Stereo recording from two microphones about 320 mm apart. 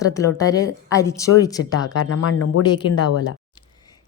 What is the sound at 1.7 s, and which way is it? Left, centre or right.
Speech, left.